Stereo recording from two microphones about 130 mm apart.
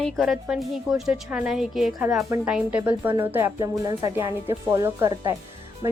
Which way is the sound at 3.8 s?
30° right (ahead or behind).